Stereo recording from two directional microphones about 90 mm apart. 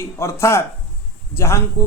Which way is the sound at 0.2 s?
30° left (ahead or behind).